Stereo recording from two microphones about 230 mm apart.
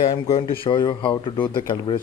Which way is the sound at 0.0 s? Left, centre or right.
Left.